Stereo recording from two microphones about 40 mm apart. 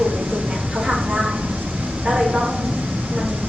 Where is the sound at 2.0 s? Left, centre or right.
Centre.